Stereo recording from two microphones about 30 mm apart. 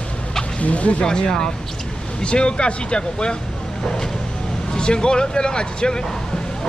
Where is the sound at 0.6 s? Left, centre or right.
Left.